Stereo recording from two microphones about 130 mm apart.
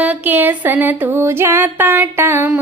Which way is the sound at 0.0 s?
10° right (ahead or behind).